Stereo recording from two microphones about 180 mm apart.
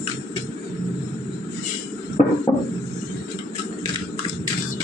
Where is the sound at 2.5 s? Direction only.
30° left (ahead or behind).